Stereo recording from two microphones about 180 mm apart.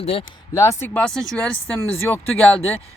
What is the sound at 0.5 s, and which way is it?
Speech, 15° left (ahead or behind).